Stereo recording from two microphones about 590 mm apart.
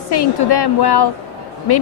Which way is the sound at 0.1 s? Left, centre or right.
Left.